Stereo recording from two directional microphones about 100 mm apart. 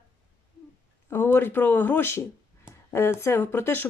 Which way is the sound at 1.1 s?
25° left (ahead or behind).